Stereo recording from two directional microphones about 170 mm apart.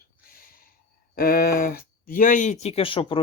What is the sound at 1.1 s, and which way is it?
Speech, 60° left (ahead or behind).